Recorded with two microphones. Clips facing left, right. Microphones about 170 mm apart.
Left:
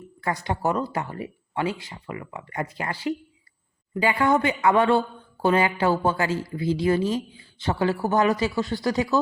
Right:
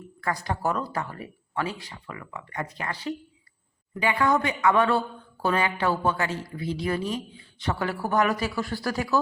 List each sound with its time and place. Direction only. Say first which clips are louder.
0.4 s speech: left 4 dB; 20° left (ahead or behind)